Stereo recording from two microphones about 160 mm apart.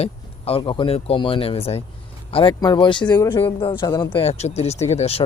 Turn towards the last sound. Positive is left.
turn(degrees=40)  # may be behind; listen again after turning